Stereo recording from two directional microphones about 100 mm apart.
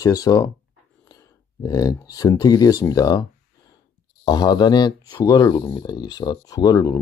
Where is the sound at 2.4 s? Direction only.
40° left (ahead or behind).